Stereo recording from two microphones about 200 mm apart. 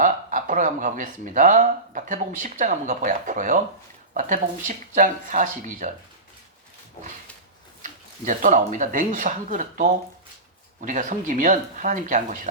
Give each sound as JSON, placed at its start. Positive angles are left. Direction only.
{"t": 0.0, "sound": "speech", "side_deg": -40}
{"t": 7.8, "sound": "speech", "side_deg": -40}